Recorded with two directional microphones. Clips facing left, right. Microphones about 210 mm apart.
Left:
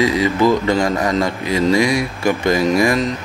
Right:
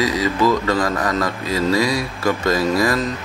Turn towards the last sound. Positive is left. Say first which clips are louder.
# left 3 dB
turn(degrees=15)  # may be behind; listen again after turning